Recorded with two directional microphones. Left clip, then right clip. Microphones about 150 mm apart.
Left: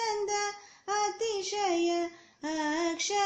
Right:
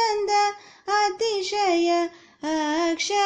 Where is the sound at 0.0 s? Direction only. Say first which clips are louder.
Right 10 dB; 45° right (ahead or behind).